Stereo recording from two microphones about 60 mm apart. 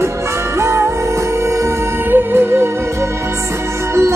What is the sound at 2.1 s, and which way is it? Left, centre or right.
Music, right.